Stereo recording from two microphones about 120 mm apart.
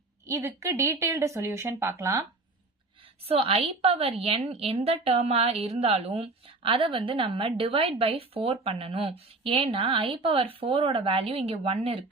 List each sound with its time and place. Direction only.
0.3 s speech: 25° right (ahead or behind)
3.2 s a woman's voice: 50° right (ahead or behind)